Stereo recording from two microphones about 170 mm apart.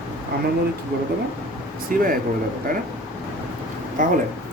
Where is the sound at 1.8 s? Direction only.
55° right (ahead or behind).